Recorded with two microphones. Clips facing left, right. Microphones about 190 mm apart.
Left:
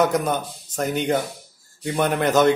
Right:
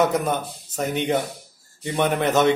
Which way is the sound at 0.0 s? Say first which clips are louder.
Left 1 dB; centre (ahead or behind).